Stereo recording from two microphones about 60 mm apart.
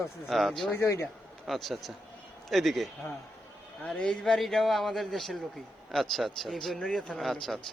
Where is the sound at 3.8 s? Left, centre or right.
Centre.